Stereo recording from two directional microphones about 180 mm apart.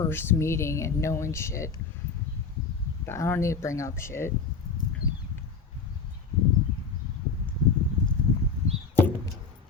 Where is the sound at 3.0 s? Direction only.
15° left (ahead or behind).